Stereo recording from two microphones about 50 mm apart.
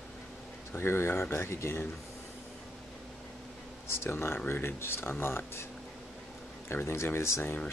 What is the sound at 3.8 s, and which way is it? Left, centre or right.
Speech, left.